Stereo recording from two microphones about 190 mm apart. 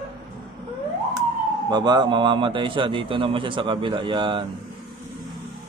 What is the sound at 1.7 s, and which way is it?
A man's voice, 20° right (ahead or behind).